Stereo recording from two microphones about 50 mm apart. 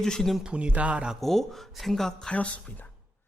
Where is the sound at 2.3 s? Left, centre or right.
Left.